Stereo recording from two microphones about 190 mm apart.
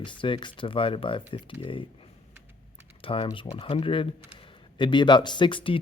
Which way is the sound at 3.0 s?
30° left (ahead or behind).